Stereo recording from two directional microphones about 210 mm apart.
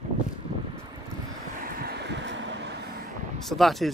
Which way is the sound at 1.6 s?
50° right (ahead or behind).